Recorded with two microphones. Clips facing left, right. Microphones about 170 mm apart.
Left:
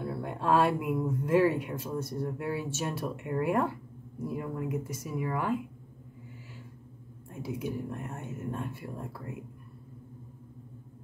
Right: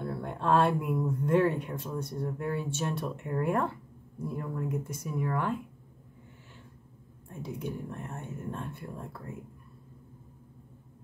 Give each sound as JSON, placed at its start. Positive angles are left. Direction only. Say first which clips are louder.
{"t": 0.0, "sound": "speech", "louder": "even", "side_deg": 5}
{"t": 7.2, "sound": "speech", "louder": "left 2 dB", "side_deg": 5}